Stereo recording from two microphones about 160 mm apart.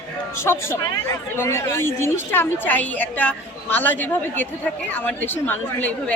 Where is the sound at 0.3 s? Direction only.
15° left (ahead or behind).